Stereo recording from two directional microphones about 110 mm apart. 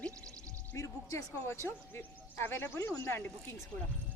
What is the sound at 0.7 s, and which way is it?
Speech, 25° left (ahead or behind).